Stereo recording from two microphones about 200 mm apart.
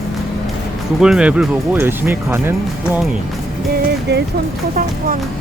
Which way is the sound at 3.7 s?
55° right (ahead or behind).